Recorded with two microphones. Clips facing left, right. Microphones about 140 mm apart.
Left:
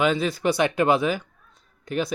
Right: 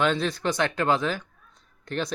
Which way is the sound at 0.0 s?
5° left (ahead or behind).